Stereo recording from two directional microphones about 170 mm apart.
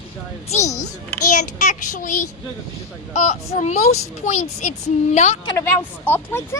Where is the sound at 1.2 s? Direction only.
50° left (ahead or behind).